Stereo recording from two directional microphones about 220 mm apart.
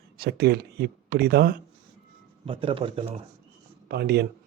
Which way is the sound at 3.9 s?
45° right (ahead or behind).